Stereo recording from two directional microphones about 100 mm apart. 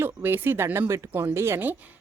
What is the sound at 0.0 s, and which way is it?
A woman's voice, 20° right (ahead or behind).